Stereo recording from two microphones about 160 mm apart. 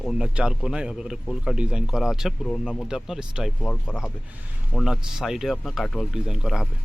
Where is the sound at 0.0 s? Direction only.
5° right (ahead or behind).